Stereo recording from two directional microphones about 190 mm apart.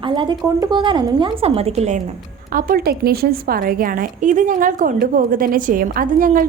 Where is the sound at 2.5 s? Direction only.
50° right (ahead or behind).